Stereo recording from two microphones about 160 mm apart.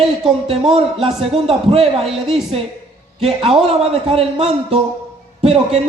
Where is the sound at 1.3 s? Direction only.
35° right (ahead or behind).